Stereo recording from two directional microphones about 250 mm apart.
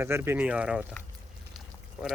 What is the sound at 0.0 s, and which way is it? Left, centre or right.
Speech, centre.